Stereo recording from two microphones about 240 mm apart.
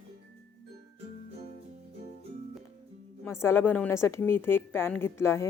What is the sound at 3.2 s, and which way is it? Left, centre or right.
A woman's voice, centre.